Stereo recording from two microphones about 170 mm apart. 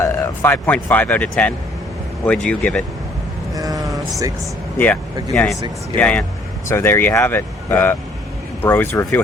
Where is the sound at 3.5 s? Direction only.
20° right (ahead or behind).